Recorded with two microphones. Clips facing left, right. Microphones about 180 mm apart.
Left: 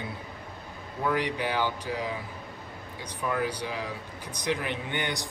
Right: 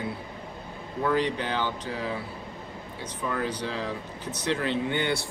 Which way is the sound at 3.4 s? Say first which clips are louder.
Right 2 dB; 10° left (ahead or behind).